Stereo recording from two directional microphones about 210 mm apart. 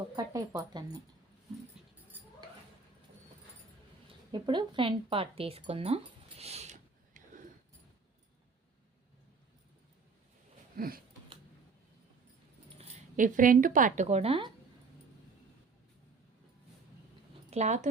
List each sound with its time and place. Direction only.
0.2 s speech: 15° right (ahead or behind)
4.3 s speech: 20° right (ahead or behind)
10.8 s a sound: 45° right (ahead or behind)
12.8 s speech: 40° right (ahead or behind)
17.5 s speech: 35° right (ahead or behind)